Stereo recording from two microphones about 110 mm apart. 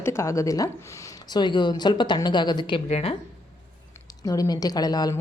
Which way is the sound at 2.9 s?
70° left (ahead or behind).